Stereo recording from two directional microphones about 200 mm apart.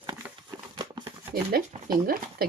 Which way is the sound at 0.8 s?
20° right (ahead or behind).